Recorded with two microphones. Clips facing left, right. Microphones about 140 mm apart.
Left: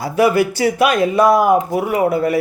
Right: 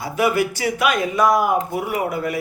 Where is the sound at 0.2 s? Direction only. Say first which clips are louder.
Left 5 dB; 30° left (ahead or behind).